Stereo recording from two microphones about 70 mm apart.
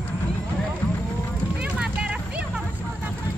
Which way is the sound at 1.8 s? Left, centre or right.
Centre.